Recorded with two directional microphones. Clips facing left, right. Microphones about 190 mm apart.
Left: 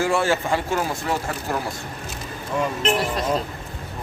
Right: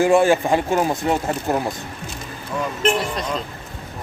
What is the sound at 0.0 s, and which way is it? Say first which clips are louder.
Speech: right 6 dB; 15° right (ahead or behind).